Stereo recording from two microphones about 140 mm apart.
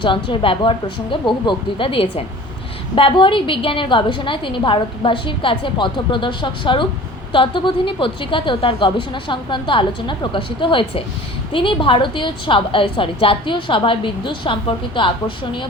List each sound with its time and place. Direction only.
0.0 s a woman's voice: 35° left (ahead or behind)